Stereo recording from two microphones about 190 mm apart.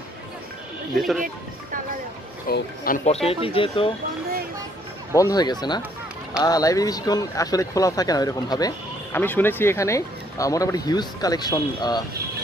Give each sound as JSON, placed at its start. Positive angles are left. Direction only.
{"t": 0.9, "sound": "speech", "side_deg": 0}
{"t": 2.4, "sound": "speech", "side_deg": 50}
{"t": 3.1, "sound": "speech", "side_deg": 30}
{"t": 5.1, "sound": "speech", "side_deg": 20}